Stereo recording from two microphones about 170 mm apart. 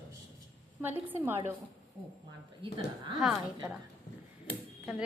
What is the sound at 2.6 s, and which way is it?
Speech, 30° right (ahead or behind).